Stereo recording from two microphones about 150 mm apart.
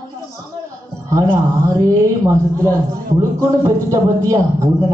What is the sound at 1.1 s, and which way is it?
A man's voice, 20° right (ahead or behind).